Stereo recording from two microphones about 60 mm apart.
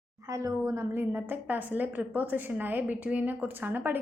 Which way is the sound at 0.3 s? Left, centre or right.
Right.